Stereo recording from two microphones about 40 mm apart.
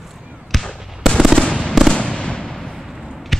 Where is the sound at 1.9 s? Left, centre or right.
Left.